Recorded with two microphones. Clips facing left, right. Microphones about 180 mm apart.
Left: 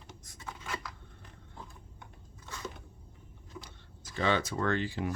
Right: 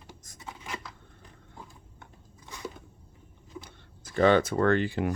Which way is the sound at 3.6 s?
55° right (ahead or behind).